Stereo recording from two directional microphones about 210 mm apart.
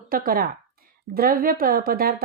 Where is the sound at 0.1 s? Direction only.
45° right (ahead or behind).